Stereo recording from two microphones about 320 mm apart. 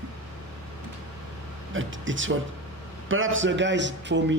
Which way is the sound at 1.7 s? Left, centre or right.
Right.